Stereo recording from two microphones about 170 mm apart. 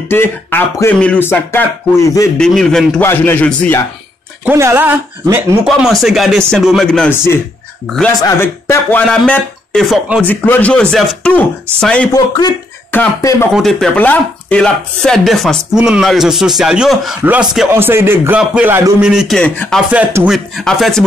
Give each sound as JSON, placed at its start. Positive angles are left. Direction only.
{"t": 0.1, "sound": "speech", "side_deg": 10}
{"t": 2.3, "sound": "speech", "side_deg": 5}
{"t": 4.5, "sound": "speech", "side_deg": -15}
{"t": 5.7, "sound": "speech", "side_deg": 0}
{"t": 10.2, "sound": "speech", "side_deg": 10}
{"t": 12.1, "sound": "speech", "side_deg": 25}
{"t": 13.5, "sound": "speech", "side_deg": 0}
{"t": 19.9, "sound": "speech", "side_deg": -10}
{"t": 20.2, "sound": "speech", "side_deg": 0}